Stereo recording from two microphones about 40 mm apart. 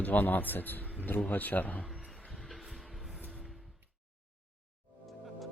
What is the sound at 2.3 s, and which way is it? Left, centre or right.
Vehicle, centre.